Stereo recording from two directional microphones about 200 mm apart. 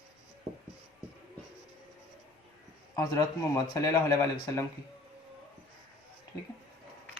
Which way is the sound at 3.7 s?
15° left (ahead or behind).